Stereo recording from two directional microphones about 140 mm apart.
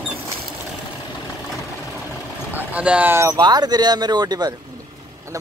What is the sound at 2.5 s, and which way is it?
Speech, 10° right (ahead or behind).